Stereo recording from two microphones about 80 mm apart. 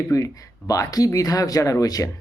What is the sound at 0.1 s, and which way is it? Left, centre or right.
Speech, left.